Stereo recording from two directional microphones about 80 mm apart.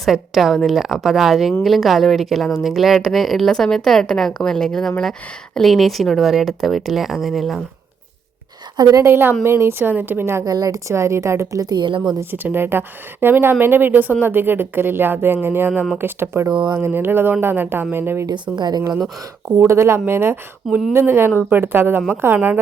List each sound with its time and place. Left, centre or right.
0.0 s speech: centre
8.7 s a woman's voice: right
9.0 s a woman's voice: right
10.4 s speech: right
11.6 s a woman's voice: right
12.3 s a woman's voice: right
18.5 s speech: right
19.5 s a woman's voice: right